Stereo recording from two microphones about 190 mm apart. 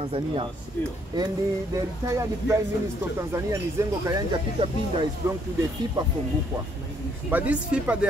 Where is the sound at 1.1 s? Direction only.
20° right (ahead or behind).